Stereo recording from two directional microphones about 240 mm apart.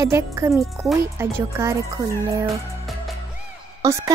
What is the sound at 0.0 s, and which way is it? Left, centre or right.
A woman's voice, centre.